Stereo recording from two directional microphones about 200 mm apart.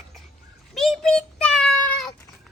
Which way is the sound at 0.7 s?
Centre (ahead or behind).